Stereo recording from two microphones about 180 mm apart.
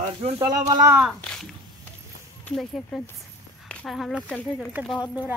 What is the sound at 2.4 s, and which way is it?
Speech, centre (ahead or behind).